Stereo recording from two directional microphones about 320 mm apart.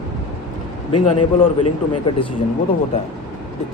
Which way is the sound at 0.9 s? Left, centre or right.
Left.